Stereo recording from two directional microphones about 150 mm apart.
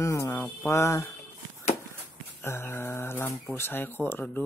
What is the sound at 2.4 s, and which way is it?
Speech, 15° left (ahead or behind).